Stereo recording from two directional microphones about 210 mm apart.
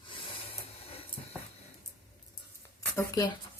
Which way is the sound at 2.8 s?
15° left (ahead or behind).